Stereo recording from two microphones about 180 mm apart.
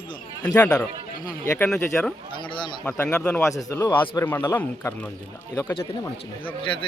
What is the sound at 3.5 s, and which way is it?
Speech, 20° left (ahead or behind).